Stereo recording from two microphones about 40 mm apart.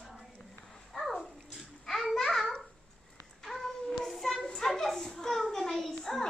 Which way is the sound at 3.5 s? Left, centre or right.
Centre.